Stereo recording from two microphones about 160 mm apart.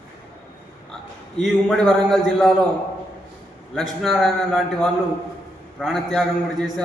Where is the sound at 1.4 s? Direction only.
Centre (ahead or behind).